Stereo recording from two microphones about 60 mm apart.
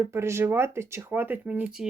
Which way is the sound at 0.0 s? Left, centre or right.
Right.